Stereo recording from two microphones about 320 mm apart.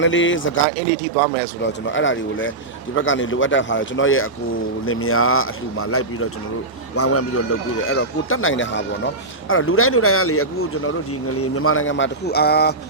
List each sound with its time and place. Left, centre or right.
0.0 s speech: left
1.6 s a man's voice: left